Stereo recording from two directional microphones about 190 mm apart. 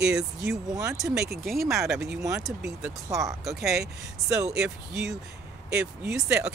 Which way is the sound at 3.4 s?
Centre (ahead or behind).